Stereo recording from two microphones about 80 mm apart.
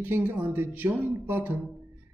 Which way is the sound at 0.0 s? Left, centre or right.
Right.